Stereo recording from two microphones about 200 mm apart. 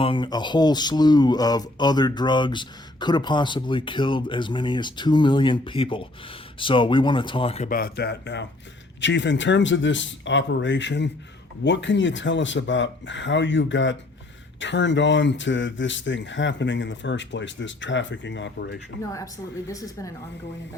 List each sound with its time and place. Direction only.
0.0 s speech: 25° left (ahead or behind)
7.7 s speech: 50° left (ahead or behind); by 18.8 s 65° left (ahead or behind)
19.1 s a woman's voice: 15° left (ahead or behind)